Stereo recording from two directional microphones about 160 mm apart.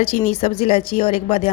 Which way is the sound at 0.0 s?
40° left (ahead or behind).